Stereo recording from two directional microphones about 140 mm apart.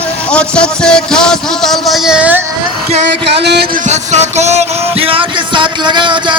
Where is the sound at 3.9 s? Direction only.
55° right (ahead or behind).